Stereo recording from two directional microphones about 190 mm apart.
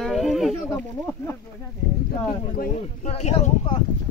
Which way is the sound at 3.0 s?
35° left (ahead or behind).